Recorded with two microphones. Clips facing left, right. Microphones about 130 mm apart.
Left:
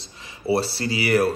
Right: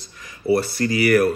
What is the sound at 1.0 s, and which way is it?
Speech, 25° left (ahead or behind).